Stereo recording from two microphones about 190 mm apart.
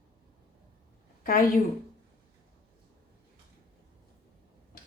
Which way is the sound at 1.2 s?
45° left (ahead or behind).